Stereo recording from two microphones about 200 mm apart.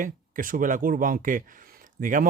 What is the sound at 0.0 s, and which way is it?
Speech, 45° right (ahead or behind).